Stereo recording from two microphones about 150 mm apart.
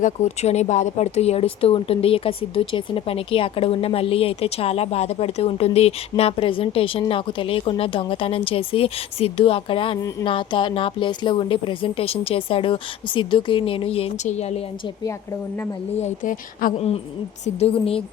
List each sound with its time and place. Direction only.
0.0 s speech: 50° left (ahead or behind)
16.0 s speech: 55° left (ahead or behind)
17.4 s speech: 40° left (ahead or behind)